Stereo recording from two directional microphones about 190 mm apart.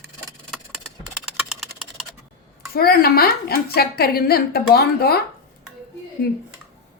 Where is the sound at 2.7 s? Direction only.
55° left (ahead or behind).